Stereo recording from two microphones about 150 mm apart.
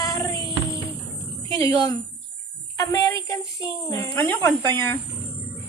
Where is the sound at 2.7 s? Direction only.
20° left (ahead or behind).